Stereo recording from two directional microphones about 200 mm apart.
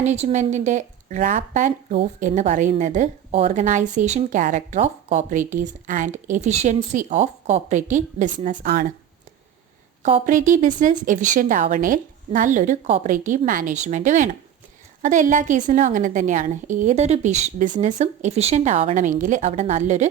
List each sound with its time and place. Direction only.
0.0 s speech: 35° right (ahead or behind)
10.0 s speech: 40° right (ahead or behind)